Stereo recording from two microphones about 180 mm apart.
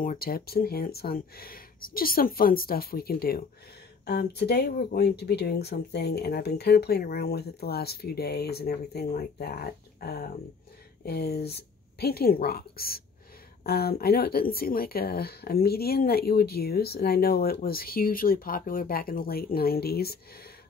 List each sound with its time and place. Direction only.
0.0 s speech: 50° left (ahead or behind)